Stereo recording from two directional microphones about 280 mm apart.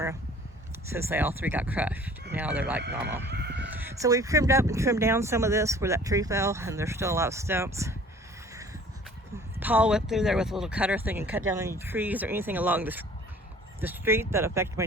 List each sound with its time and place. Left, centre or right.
0.9 s speech: centre
3.2 s fowl: right
3.8 s speech: centre
9.6 s speech: centre